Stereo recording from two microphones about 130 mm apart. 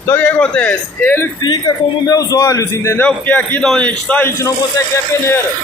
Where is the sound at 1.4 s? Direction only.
30° left (ahead or behind); by 4.3 s 10° left (ahead or behind).